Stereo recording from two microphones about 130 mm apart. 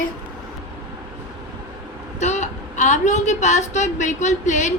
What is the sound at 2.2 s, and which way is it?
A woman's voice, 65° left (ahead or behind).